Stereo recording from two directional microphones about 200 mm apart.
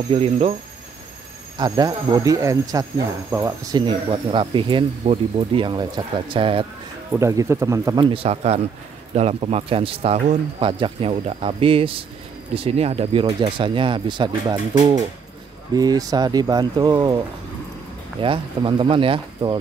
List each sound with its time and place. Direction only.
0.1 s speech: 30° right (ahead or behind)
1.6 s speech: 20° right (ahead or behind)
7.2 s a man's voice: 15° right (ahead or behind)
15.7 s speech: 20° right (ahead or behind)
18.2 s speech: 25° right (ahead or behind)